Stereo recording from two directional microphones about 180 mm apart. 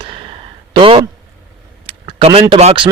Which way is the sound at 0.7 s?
25° right (ahead or behind).